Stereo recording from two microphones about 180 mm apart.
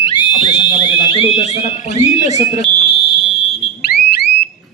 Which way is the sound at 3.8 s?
60° left (ahead or behind).